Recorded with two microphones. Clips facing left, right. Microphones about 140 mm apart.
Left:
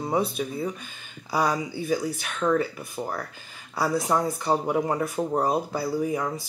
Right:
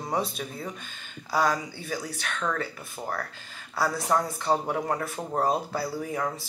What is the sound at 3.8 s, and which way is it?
Speech, 5° left (ahead or behind).